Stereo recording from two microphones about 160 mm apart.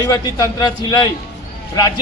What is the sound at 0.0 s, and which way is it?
A man's voice, 25° left (ahead or behind).